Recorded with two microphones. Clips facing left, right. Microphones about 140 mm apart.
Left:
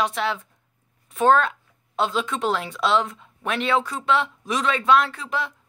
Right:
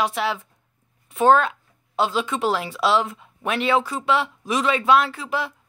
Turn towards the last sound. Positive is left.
turn(degrees=-5)  # may be behind; listen again after turning